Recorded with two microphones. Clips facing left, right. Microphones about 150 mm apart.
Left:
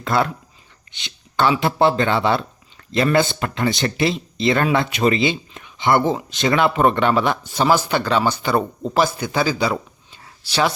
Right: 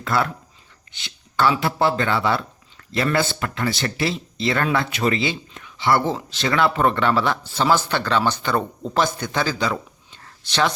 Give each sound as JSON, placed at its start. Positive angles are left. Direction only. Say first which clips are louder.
{"t": 0.0, "sound": "speech", "louder": "left 2 dB", "side_deg": 20}